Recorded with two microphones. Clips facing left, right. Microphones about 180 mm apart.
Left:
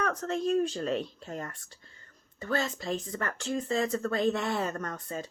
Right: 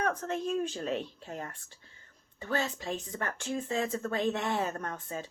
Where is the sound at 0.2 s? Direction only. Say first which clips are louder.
Left 4 dB; 40° left (ahead or behind).